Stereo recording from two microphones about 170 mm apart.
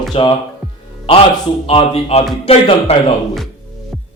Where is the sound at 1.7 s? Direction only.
35° left (ahead or behind).